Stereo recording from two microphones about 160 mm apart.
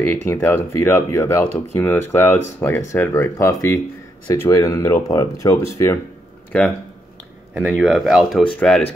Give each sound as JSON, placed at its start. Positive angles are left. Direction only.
{"t": 0.0, "sound": "speech", "side_deg": 15}
{"t": 6.5, "sound": "speech", "side_deg": 5}